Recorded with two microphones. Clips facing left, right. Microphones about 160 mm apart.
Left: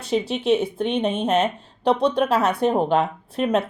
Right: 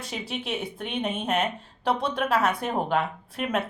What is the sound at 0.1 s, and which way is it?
Speech, 25° left (ahead or behind).